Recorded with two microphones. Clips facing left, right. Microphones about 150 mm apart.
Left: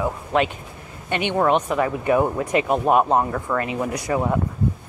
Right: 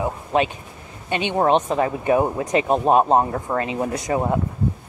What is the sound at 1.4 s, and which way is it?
Speech, 25° right (ahead or behind).